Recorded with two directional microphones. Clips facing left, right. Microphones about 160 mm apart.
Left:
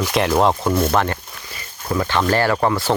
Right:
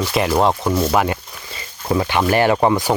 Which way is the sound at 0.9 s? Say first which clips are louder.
Right 1 dB; 10° right (ahead or behind).